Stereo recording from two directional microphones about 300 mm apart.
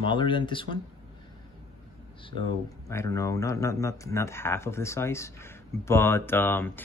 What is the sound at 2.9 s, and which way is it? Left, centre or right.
Speech, centre.